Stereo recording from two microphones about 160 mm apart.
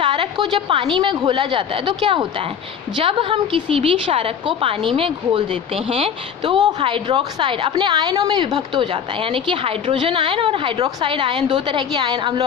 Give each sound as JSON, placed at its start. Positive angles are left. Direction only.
{"t": 0.0, "sound": "a woman's voice", "side_deg": -30}